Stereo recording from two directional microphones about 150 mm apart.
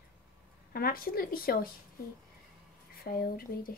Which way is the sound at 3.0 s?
80° left.